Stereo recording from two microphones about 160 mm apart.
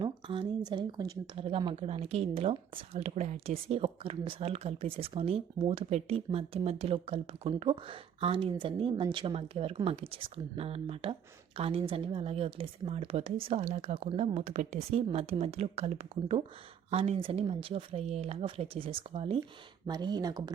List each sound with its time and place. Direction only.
0.0 s a woman's voice: 30° right (ahead or behind)
19.9 s speech: 25° right (ahead or behind)